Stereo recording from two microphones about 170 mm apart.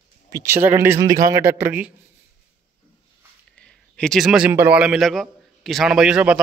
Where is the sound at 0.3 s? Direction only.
15° right (ahead or behind).